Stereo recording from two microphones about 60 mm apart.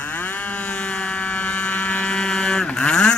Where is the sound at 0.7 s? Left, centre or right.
Centre.